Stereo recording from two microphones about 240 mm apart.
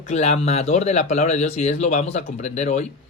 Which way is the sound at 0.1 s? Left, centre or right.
Left.